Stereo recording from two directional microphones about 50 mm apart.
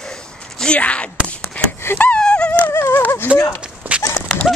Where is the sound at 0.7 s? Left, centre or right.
Left.